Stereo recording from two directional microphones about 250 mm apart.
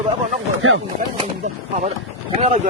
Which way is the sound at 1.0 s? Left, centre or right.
Right.